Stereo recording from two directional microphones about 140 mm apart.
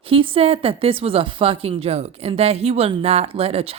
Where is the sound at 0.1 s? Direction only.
40° right (ahead or behind).